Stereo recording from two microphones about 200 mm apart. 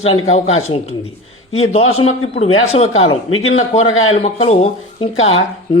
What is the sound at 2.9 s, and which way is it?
Speech, 90° left.